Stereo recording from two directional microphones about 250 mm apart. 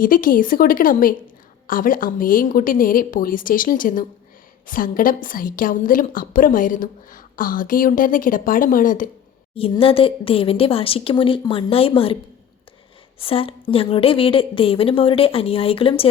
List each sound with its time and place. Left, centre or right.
0.0 s a woman's voice: left
9.6 s a woman's voice: left
13.1 s a woman's voice: left